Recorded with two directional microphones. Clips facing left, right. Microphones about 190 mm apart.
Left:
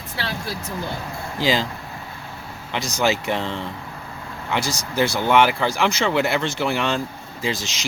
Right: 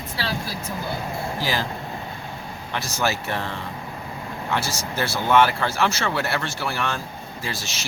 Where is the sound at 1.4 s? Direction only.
15° left (ahead or behind).